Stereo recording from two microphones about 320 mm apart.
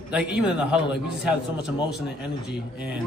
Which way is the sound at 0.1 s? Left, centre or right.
Centre.